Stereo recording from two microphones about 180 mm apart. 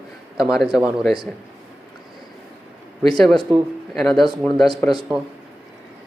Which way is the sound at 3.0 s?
Centre (ahead or behind).